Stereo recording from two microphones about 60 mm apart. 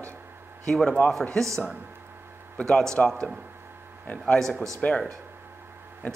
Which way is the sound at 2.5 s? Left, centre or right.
Centre.